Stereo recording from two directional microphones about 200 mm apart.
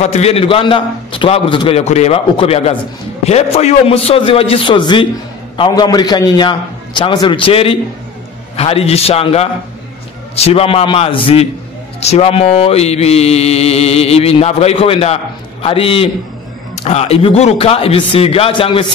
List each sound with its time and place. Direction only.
0.0 s a man's voice: 30° left (ahead or behind)
8.5 s mantra: 30° left (ahead or behind)
10.3 s a man's voice: 30° left (ahead or behind)
12.0 s mantra: 30° left (ahead or behind)
15.6 s a man's voice: 30° left (ahead or behind)